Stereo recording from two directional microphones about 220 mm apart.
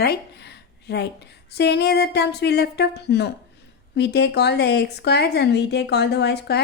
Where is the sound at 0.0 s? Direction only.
45° left (ahead or behind).